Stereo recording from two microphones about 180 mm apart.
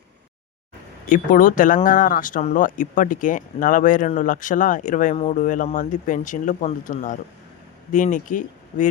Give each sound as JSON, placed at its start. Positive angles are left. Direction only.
{"t": 1.0, "sound": "speech", "side_deg": 45}